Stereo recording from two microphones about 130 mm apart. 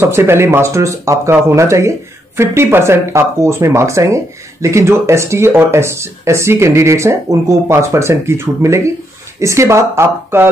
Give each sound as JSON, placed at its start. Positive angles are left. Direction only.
{"t": 0.0, "sound": "speech", "side_deg": -20}